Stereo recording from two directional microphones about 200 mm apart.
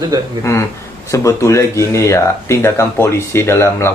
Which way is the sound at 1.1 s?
15° left (ahead or behind).